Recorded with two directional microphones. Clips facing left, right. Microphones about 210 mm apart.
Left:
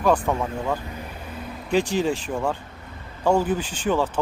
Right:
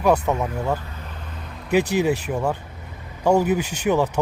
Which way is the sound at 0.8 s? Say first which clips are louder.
Left 3 dB; 10° left (ahead or behind).